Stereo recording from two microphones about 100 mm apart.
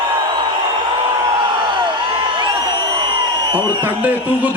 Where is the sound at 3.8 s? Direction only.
15° right (ahead or behind).